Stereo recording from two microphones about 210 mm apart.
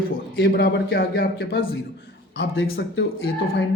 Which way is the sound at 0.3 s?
50° left (ahead or behind).